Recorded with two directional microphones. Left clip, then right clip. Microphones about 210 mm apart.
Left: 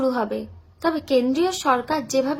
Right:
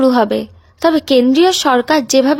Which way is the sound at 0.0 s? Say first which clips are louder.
Right 11 dB; 40° right (ahead or behind).